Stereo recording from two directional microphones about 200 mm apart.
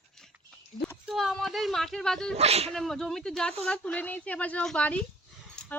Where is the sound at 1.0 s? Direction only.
Centre (ahead or behind).